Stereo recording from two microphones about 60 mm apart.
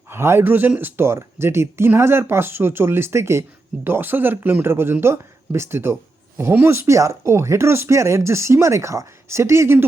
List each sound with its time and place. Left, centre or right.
0.1 s speech: right
3.8 s speech: right